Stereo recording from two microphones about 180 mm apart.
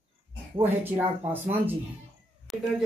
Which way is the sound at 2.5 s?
Centre (ahead or behind).